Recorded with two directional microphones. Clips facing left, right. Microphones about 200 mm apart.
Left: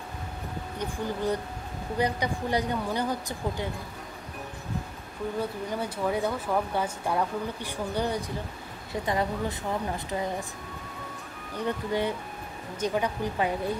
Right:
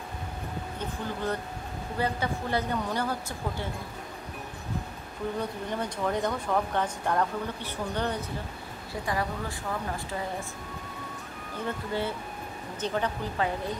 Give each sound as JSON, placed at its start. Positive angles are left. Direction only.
{"t": 0.7, "sound": "speech", "side_deg": 15}
{"t": 5.4, "sound": "speech", "side_deg": 5}
{"t": 9.0, "sound": "speech", "side_deg": 20}
{"t": 11.5, "sound": "speech", "side_deg": 15}